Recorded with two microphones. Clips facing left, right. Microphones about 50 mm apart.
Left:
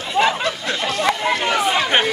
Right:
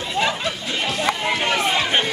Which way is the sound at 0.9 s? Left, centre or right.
Centre.